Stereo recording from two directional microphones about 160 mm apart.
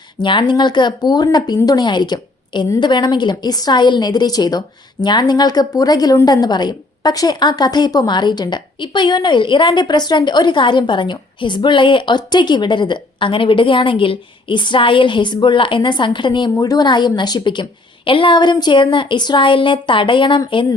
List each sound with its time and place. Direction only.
0.2 s speech: 30° left (ahead or behind)